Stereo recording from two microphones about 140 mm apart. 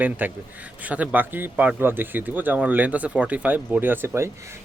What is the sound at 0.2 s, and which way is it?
Speech, 15° right (ahead or behind).